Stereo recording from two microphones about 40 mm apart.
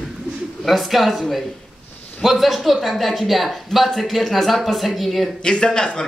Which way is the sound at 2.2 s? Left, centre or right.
Centre.